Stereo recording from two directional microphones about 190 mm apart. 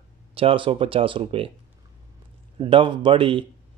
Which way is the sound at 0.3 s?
30° right (ahead or behind).